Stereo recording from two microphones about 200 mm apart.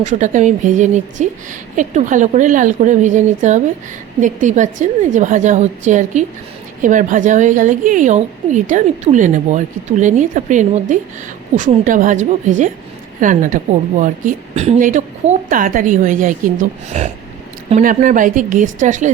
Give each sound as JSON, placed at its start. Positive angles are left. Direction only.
{"t": 0.0, "sound": "a woman's voice", "side_deg": -40}